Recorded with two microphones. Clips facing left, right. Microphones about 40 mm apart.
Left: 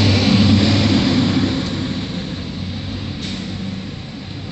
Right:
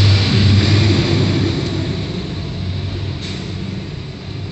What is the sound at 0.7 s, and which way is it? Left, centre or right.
Vehicle, right.